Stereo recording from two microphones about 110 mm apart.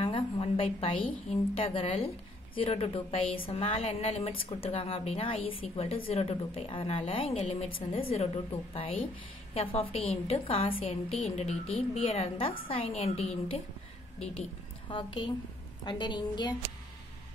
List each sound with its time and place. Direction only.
0.0 s a woman's voice: 55° left (ahead or behind)
7.3 s a woman's voice: 90° left
7.9 s a woman's voice: 65° left (ahead or behind)
11.2 s a woman's voice: 70° left (ahead or behind)
15.8 s a woman's voice: 45° left (ahead or behind)